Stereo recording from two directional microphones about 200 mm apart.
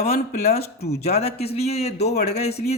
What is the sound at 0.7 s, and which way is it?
Speech, 55° left (ahead or behind).